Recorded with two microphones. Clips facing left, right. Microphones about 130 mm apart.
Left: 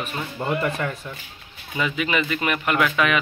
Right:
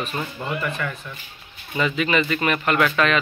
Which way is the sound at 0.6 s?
35° left (ahead or behind).